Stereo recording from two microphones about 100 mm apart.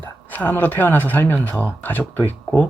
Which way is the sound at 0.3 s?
20° left (ahead or behind).